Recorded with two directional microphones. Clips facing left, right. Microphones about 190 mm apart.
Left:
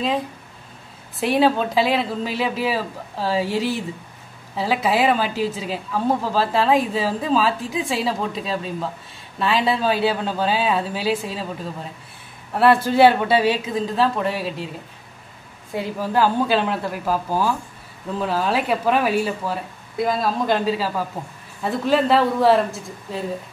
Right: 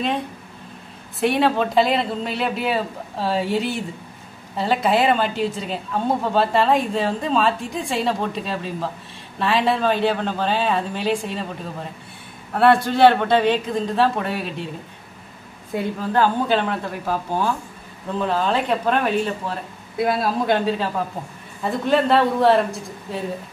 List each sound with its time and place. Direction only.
1.2 s a woman's voice: centre (ahead or behind)
12.5 s a woman's voice: centre (ahead or behind)
15.7 s a woman's voice: 10° left (ahead or behind)